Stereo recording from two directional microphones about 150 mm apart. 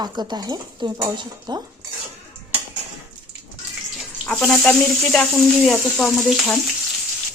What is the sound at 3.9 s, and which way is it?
Bathtub, 5° left (ahead or behind).